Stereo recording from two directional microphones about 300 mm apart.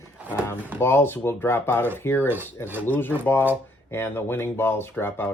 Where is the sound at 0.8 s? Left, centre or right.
Centre.